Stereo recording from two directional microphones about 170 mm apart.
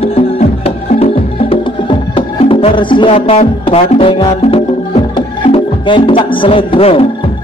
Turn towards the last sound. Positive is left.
turn(degrees=35)  # may be behind; listen again after turning